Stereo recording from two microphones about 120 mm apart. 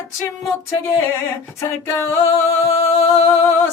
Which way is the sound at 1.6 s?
20° left (ahead or behind).